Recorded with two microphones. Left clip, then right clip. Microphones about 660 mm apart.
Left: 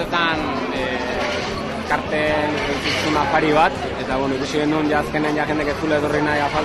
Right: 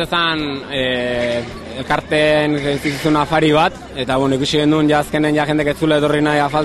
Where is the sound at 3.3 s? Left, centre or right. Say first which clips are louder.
Right 1 dB; right.